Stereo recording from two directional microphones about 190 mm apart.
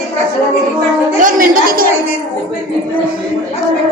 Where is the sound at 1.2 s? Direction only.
45° right (ahead or behind).